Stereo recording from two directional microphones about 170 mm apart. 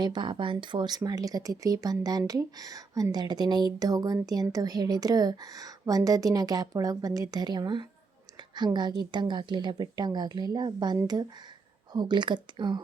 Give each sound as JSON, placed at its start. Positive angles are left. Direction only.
{"t": 0.0, "sound": "speech", "side_deg": -25}